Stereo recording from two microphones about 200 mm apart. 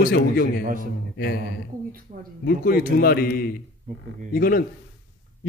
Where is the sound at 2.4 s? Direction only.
50° left (ahead or behind).